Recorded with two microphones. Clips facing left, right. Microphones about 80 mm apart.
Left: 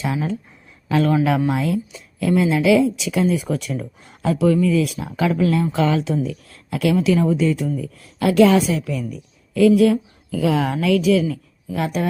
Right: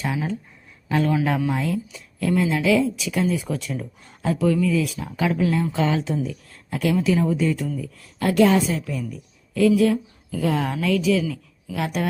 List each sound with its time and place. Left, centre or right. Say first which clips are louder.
0.0 s a man's voice: left 3 dB; left
1.5 s speech: left 3 dB; left
5.7 s speech: left 3 dB; left
6.5 s a sound: left 3 dB; left
7.0 s speech: left 2 dB; left
7.3 s a woman's voice: left 3 dB; left